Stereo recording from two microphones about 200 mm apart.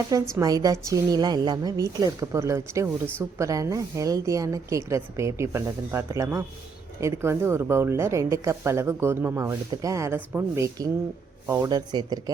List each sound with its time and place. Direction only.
0.1 s a woman's voice: 20° right (ahead or behind)